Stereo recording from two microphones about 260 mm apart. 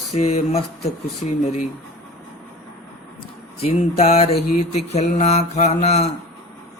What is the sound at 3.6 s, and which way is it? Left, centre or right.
Mantra, left.